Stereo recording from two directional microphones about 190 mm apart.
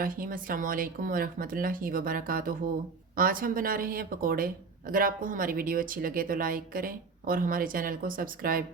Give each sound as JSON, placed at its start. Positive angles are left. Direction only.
{"t": 0.0, "sound": "speech", "side_deg": -45}